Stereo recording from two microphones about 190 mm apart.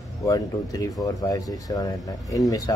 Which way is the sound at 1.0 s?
20° left (ahead or behind).